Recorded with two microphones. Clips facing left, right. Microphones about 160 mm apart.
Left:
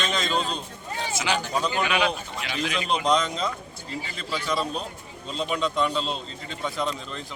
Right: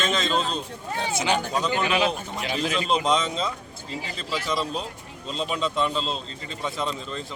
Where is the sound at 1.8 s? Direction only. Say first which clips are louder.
Right 1 dB; 35° right (ahead or behind).